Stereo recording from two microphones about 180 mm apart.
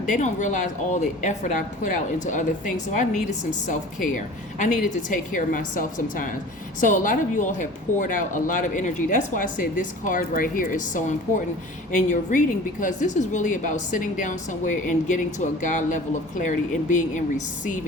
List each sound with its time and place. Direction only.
0.0 s a woman's voice: 45° left (ahead or behind)